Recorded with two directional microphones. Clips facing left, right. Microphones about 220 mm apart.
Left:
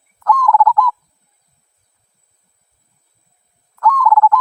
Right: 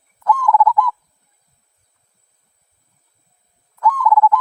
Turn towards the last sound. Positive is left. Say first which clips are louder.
# left 2 dB
turn(degrees=-5)  # may be behind; listen again after turning